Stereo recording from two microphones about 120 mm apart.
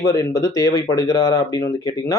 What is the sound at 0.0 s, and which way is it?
Speech, 25° left (ahead or behind).